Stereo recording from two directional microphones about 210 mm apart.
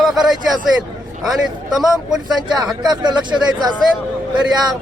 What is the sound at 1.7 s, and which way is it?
Speech, centre (ahead or behind).